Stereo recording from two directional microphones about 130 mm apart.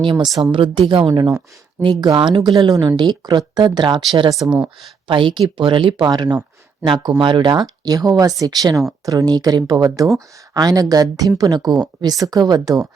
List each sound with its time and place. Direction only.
0.0 s speech: 40° right (ahead or behind)
4.4 s speech: 10° right (ahead or behind)
5.0 s speech: 40° right (ahead or behind)